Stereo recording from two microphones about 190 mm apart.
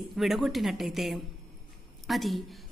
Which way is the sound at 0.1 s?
Centre (ahead or behind).